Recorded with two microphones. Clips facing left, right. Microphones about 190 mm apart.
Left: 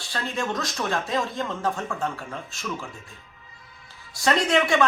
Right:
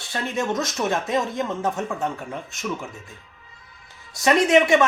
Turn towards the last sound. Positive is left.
turn(degrees=-20)  # may be behind; listen again after turning